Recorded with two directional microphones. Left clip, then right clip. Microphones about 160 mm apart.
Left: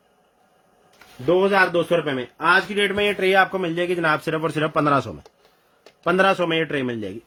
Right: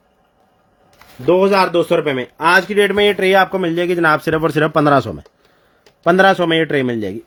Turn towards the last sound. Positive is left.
turn(degrees=-40)  # may be behind; listen again after turning